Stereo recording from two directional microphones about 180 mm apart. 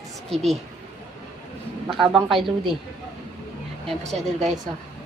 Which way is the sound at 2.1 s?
Centre (ahead or behind).